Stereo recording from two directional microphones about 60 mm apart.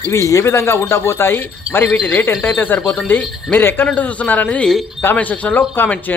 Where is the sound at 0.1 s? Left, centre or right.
Left.